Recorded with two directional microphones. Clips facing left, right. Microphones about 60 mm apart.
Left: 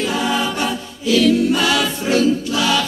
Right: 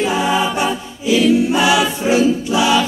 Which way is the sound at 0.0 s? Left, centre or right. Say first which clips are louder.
Right 3 dB; centre.